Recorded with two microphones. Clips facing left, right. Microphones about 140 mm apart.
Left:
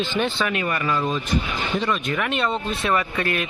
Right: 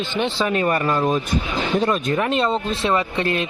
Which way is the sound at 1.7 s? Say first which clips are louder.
Right 4 dB; 50° right (ahead or behind).